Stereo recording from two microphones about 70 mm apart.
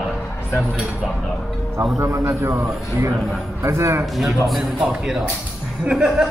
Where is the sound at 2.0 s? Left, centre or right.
Right.